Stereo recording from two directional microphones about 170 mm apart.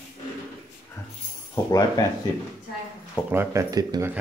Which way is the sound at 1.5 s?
20° left (ahead or behind).